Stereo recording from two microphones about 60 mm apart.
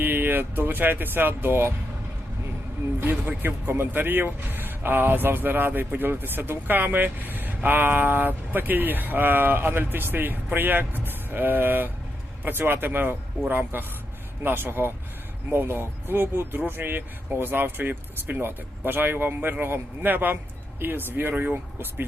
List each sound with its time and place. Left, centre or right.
0.0 s speech: right
3.0 s speech: right